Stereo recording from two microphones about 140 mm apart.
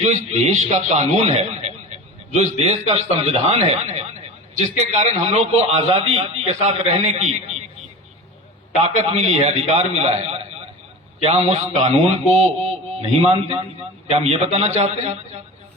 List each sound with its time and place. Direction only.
0.0 s a man's voice: 55° right (ahead or behind)
8.8 s a man's voice: 50° right (ahead or behind)